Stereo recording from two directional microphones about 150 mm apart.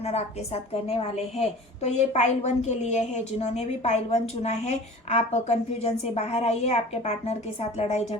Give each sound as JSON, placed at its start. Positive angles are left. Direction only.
{"t": 0.0, "sound": "a woman's voice", "side_deg": 45}